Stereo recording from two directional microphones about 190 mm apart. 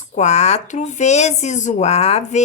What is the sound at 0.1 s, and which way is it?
Speech, 35° left (ahead or behind).